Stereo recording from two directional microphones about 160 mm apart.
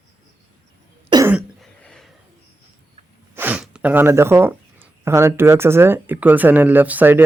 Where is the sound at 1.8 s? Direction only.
5° left (ahead or behind).